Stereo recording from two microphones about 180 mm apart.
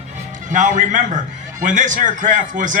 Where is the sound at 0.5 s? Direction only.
45° right (ahead or behind).